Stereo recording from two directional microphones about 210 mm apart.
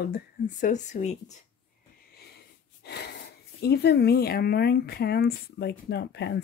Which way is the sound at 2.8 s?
50° left (ahead or behind).